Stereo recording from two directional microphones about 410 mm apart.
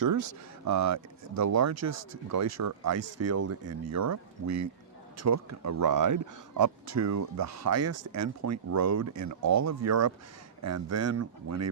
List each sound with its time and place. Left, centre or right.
0.0 s speech: right